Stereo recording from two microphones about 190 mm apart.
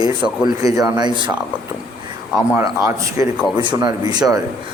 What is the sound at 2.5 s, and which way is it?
Speech, 15° right (ahead or behind).